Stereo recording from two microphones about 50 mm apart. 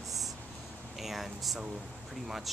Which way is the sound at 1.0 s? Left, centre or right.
Centre.